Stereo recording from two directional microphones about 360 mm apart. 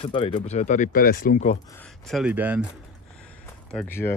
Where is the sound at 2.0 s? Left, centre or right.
Centre.